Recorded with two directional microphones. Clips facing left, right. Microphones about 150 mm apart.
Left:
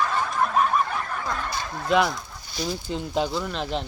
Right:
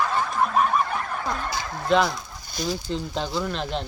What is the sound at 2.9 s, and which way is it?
Speech, 10° left (ahead or behind).